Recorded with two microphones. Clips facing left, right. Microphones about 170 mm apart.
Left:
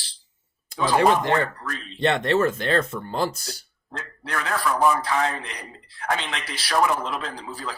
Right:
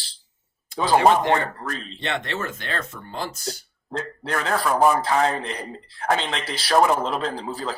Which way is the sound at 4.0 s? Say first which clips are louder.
Right 3 dB; 35° right (ahead or behind).